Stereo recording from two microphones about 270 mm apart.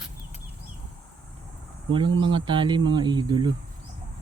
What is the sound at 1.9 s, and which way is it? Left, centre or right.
Speech, centre.